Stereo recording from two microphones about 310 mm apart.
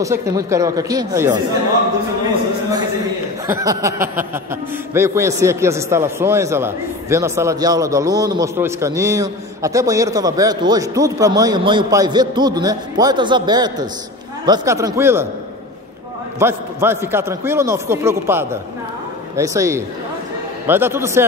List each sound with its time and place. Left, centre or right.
0.0 s a man's voice: centre
3.4 s a man's voice: centre
16.3 s a man's voice: centre